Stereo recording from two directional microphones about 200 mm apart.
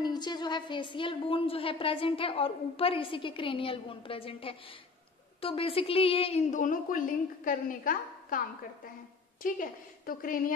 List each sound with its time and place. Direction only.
0.0 s a woman's voice: 20° left (ahead or behind); by 8.4 s 45° left (ahead or behind)
9.4 s a woman's voice: 45° left (ahead or behind)